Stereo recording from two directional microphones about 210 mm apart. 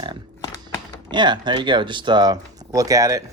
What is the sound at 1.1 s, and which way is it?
Speech, 20° right (ahead or behind).